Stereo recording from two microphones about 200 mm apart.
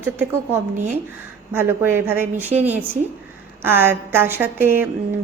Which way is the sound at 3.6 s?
10° right (ahead or behind).